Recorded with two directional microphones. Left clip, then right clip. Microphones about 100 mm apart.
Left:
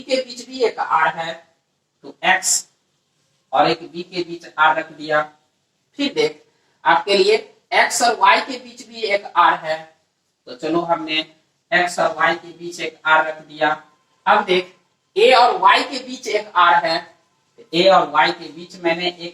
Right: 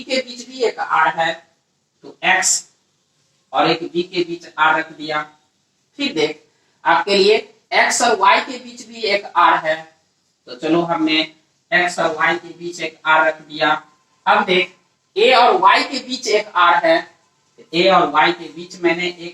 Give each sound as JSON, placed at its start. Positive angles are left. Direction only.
{"t": 0.0, "sound": "speech", "side_deg": -40}